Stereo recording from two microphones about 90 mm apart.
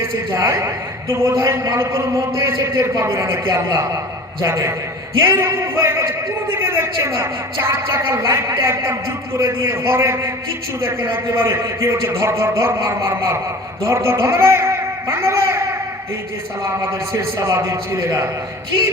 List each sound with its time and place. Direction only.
0.3 s a woman's voice: 30° right (ahead or behind)
11.3 s a woman's voice: 30° right (ahead or behind)
17.1 s a woman's voice: 30° right (ahead or behind)